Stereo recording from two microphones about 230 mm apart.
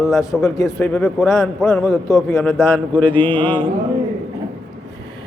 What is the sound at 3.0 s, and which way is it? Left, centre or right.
Speech, centre.